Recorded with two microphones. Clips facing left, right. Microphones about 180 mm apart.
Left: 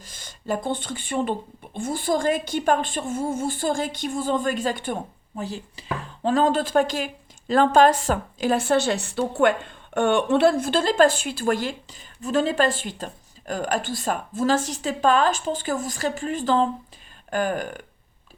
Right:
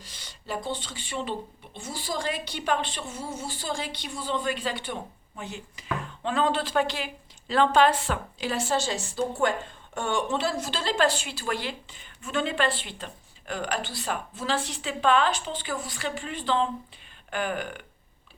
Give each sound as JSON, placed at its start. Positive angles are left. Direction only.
{"t": 0.0, "sound": "speech", "side_deg": 50}
{"t": 5.4, "sound": "speech", "side_deg": 35}